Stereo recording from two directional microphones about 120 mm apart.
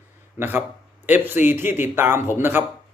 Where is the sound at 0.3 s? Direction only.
15° right (ahead or behind).